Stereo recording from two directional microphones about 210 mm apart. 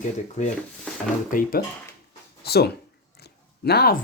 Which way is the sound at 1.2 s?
40° left (ahead or behind).